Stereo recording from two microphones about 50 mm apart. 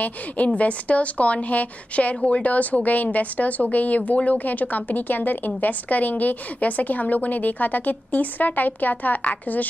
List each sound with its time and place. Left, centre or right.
0.0 s a woman's voice: left